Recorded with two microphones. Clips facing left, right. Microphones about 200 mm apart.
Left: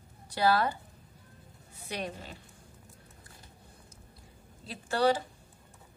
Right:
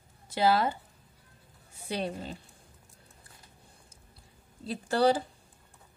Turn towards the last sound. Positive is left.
turn(degrees=-35)  # may be behind; listen again after turning